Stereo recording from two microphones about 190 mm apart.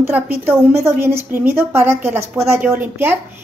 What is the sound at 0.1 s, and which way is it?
A woman's voice, 15° right (ahead or behind).